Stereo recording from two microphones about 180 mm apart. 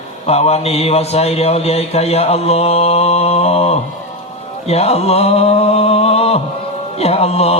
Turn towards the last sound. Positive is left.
turn(degrees=35)  # may be behind; listen again after turning